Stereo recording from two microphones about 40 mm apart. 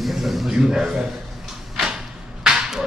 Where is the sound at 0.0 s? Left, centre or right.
Centre.